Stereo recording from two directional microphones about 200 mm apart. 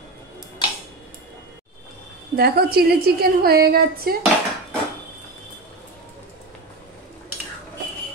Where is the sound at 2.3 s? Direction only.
50° right (ahead or behind).